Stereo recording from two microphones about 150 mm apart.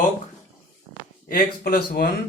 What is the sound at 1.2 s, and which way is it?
Speech, 80° left.